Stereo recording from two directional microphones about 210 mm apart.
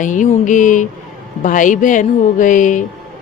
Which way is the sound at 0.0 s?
35° left (ahead or behind).